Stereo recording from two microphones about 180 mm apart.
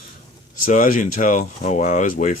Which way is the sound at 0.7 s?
45° left (ahead or behind).